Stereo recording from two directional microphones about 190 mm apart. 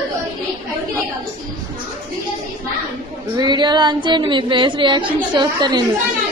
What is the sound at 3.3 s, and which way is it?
Female singing, 20° right (ahead or behind).